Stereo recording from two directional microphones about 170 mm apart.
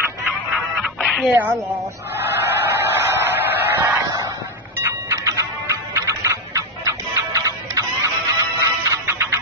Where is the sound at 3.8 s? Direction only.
20° right (ahead or behind).